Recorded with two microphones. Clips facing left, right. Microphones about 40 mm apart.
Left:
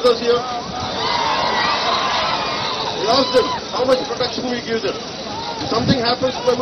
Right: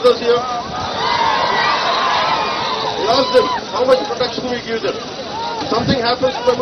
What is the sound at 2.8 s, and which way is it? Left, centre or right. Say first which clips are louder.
Speech: right 1 dB; centre.